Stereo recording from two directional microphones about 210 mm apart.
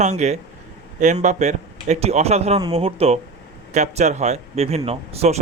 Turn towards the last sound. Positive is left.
turn(degrees=-30)  # may be behind; listen again after turning